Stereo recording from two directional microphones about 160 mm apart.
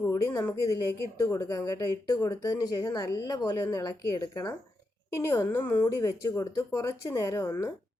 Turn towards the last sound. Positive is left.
turn(degrees=20)  # may be behind; listen again after turning